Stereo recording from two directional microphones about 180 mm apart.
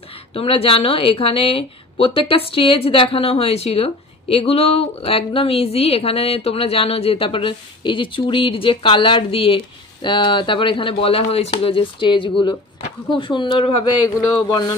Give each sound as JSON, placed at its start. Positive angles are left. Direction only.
{"t": 0.3, "sound": "a woman's voice", "side_deg": 30}
{"t": 14.0, "sound": "speech", "side_deg": 20}